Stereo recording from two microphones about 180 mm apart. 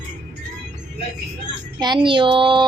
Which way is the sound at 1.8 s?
25° right (ahead or behind).